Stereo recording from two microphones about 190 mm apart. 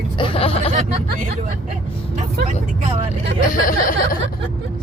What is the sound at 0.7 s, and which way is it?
Speech, 45° right (ahead or behind).